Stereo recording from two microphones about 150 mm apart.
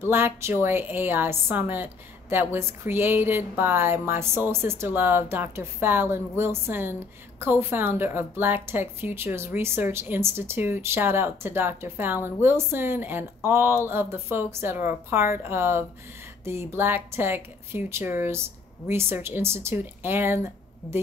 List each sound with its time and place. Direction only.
0.0 s a woman's voice: 15° right (ahead or behind)